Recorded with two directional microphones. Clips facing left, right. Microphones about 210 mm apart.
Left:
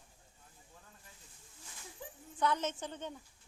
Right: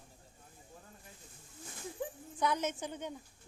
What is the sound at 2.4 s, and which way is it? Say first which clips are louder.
Speech: even; 15° right (ahead or behind).